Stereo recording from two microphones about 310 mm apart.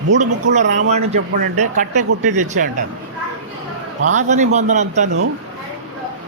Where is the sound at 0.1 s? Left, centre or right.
Right.